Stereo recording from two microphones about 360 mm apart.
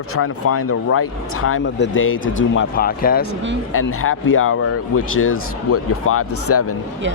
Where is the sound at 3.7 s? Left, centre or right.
Left.